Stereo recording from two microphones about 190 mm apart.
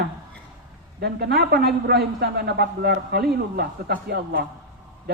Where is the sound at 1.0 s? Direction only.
55° right (ahead or behind).